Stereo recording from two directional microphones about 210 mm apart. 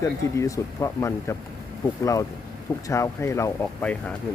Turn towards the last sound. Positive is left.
turn(degrees=5)  # may be behind; listen again after turning